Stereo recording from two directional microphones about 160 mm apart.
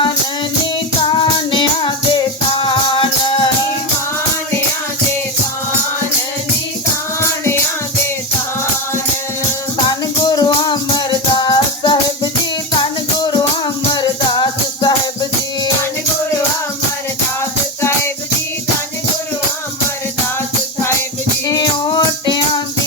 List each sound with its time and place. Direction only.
1.1 s music: 30° left (ahead or behind)
9.8 s music: 25° left (ahead or behind)
13.9 s music: 25° left (ahead or behind)
21.4 s music: 25° left (ahead or behind)